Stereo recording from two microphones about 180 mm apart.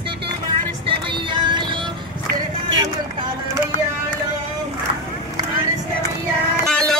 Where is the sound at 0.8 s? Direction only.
25° right (ahead or behind).